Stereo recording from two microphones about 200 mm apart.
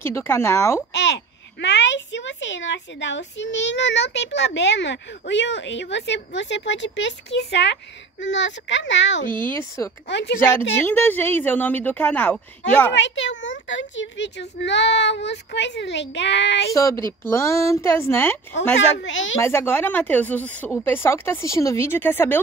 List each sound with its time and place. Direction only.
0.0 s speech: 10° left (ahead or behind)
1.0 s a child's voice: 60° left (ahead or behind)
9.3 s speech: 10° left (ahead or behind)
10.0 s a child's voice: 60° left (ahead or behind)
10.9 s speech: 10° left (ahead or behind)
12.9 s a child's voice: 65° left (ahead or behind)
16.7 s speech: 15° left (ahead or behind)
18.8 s speech: 65° left (ahead or behind)
19.4 s speech: 10° left (ahead or behind)